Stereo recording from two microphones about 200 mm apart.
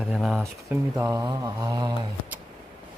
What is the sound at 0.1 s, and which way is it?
Speech, 5° right (ahead or behind).